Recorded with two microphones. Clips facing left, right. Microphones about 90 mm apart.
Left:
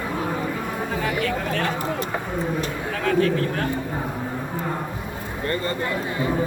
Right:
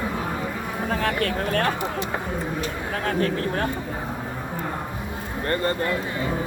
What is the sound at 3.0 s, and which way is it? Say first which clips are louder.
Speech: left 4 dB; 35° right (ahead or behind).